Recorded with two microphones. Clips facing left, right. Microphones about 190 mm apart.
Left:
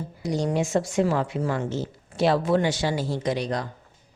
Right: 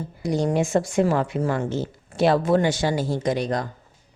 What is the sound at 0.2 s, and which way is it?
A woman's voice, 55° right (ahead or behind).